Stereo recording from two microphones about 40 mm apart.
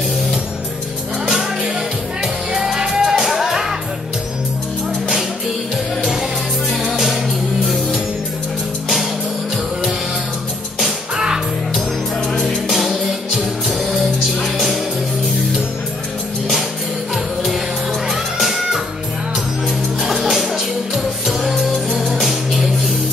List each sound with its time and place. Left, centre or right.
1.2 s music: centre
6.9 s music: centre
12.6 s music: centre
17.1 s music: centre
20.0 s music: centre